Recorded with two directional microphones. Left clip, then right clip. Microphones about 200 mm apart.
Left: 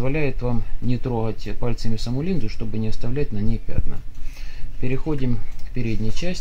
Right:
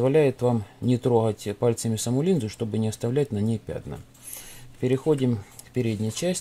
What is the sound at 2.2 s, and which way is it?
Speech, 75° right (ahead or behind).